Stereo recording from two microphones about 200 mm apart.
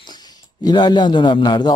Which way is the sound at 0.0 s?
20° left (ahead or behind).